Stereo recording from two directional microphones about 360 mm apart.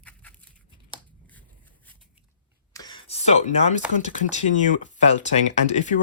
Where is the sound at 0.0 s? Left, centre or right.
Centre.